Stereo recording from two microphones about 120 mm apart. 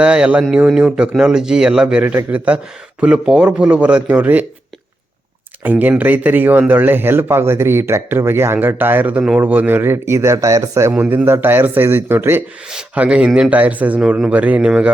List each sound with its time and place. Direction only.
0.0 s a man's voice: 10° right (ahead or behind)
5.8 s a man's voice: 15° right (ahead or behind)
10.9 s a man's voice: 10° right (ahead or behind)